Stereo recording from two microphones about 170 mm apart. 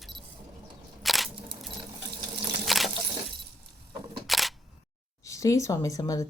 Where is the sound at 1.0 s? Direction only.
Centre (ahead or behind).